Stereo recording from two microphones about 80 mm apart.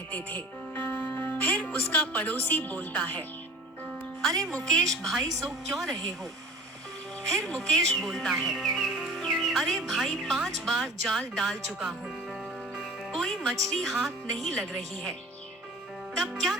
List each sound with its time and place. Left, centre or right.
0.1 s speech: left
4.9 s speech: centre
7.3 s speech: centre
13.1 s music: centre
13.7 s speech: centre
16.2 s speech: centre